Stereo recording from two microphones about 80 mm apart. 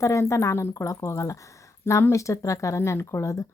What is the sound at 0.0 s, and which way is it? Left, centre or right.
Speech, left.